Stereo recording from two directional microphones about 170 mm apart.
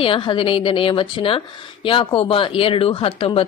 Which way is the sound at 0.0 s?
30° left (ahead or behind).